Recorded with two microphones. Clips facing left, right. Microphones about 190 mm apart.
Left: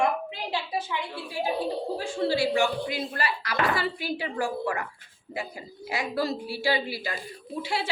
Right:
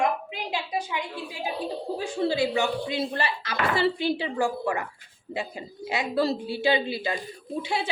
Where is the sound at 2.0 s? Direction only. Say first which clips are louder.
Right 1 dB; 20° right (ahead or behind).